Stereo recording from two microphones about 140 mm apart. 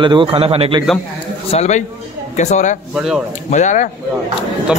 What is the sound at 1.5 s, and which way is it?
A man's voice, 55° left (ahead or behind).